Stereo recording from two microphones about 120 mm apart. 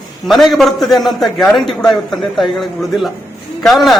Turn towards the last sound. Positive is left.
turn(degrees=0)  # may be behind; listen again after turning